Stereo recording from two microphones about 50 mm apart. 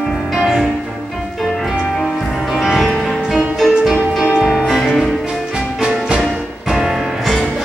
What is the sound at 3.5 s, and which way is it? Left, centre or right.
Music, centre.